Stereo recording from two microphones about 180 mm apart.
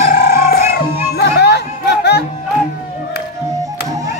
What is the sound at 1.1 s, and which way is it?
Music, 65° left (ahead or behind).